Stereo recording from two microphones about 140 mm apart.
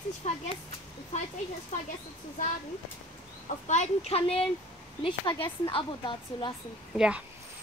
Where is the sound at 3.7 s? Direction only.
50° left (ahead or behind); by 6.5 s 35° left (ahead or behind).